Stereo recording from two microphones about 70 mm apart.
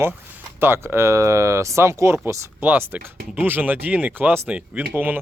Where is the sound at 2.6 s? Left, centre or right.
Right.